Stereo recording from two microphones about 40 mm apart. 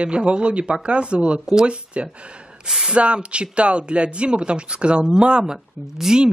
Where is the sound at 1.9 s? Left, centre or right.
Right.